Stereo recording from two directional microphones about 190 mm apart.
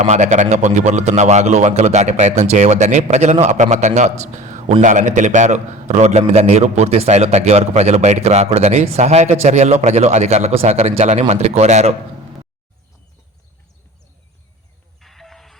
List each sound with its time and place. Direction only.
0.0 s a man's voice: 40° right (ahead or behind)
15.0 s music: centre (ahead or behind)